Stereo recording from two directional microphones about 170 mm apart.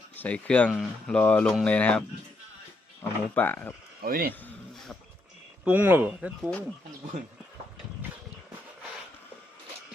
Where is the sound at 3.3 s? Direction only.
10° left (ahead or behind).